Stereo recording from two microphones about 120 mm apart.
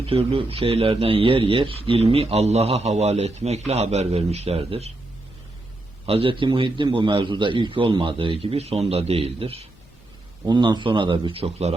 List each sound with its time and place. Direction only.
0.0 s a man's voice: 55° right (ahead or behind)
2.1 s a man's voice: 60° right (ahead or behind)
6.1 s a man's voice: 50° right (ahead or behind)
10.4 s a man's voice: 40° right (ahead or behind)